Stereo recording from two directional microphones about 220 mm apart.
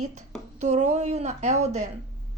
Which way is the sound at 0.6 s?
30° right (ahead or behind).